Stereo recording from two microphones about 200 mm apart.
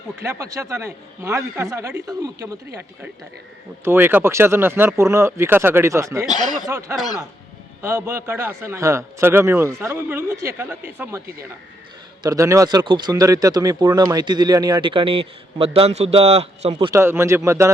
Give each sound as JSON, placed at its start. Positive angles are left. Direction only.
{"t": 0.2, "sound": "a man's voice", "side_deg": -15}
{"t": 3.8, "sound": "a man's voice", "side_deg": -10}
{"t": 6.2, "sound": "speech", "side_deg": 20}
{"t": 6.7, "sound": "a man's voice", "side_deg": -15}
{"t": 12.2, "sound": "speech", "side_deg": -15}
{"t": 16.7, "sound": "a man's voice", "side_deg": -15}